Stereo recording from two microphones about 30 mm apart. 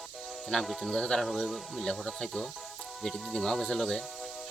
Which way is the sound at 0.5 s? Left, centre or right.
Left.